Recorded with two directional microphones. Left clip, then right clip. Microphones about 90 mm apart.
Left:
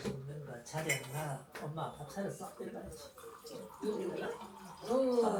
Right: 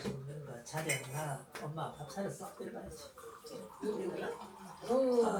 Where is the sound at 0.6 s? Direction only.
5° left (ahead or behind).